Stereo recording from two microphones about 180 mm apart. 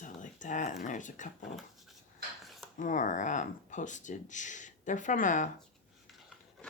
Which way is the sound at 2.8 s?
45° left (ahead or behind).